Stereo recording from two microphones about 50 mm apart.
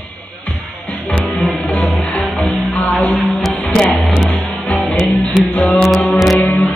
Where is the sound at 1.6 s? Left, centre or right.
Left.